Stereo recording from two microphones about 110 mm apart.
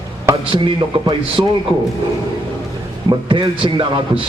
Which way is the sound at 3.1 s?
45° right (ahead or behind).